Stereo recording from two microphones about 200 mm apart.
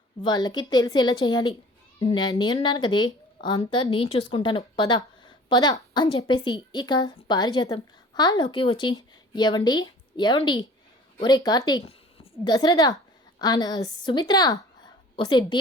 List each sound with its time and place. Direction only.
0.2 s a woman's voice: 20° left (ahead or behind)